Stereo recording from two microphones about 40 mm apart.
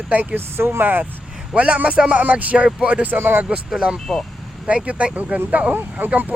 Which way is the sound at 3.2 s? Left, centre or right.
Right.